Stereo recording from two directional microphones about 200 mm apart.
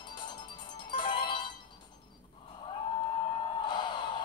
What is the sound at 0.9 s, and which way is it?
Music, 25° left (ahead or behind).